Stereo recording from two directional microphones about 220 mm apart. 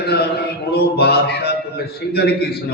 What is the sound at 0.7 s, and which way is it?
A man's voice, 45° left (ahead or behind).